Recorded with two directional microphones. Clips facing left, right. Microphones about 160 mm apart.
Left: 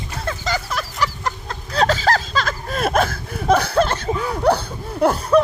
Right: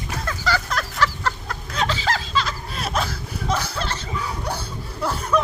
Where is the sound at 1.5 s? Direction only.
40° left (ahead or behind); by 5.1 s 60° left (ahead or behind).